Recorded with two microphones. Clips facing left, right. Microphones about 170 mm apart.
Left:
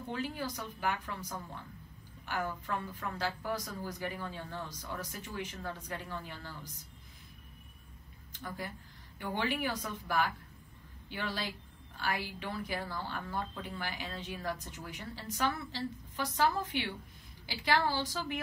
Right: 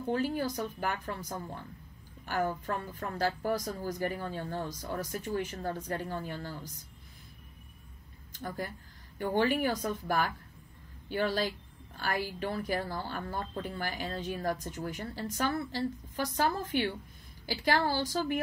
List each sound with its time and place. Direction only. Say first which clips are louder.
0.1 s a woman's voice: right 7 dB; 45° right (ahead or behind)
8.4 s a woman's voice: right 4 dB; 40° right (ahead or behind)